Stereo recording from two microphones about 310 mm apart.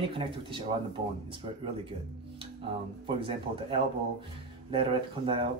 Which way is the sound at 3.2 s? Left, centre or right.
Centre.